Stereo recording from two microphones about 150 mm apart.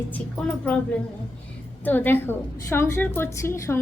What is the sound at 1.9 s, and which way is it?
A woman's voice, 15° left (ahead or behind).